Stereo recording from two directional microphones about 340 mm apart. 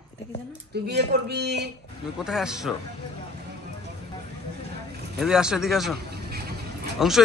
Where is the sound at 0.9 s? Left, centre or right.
Right.